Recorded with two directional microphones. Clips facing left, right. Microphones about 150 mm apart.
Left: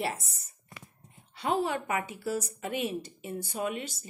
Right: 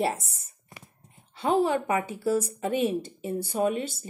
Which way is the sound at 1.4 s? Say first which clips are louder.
Right 6 dB; 30° right (ahead or behind).